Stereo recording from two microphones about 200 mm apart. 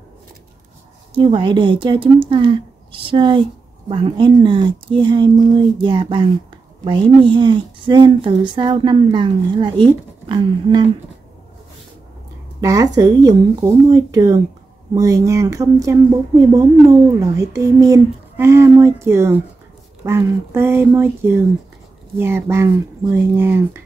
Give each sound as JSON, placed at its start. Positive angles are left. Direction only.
{"t": 1.1, "sound": "a woman's voice", "side_deg": -25}
{"t": 12.5, "sound": "a woman's voice", "side_deg": -15}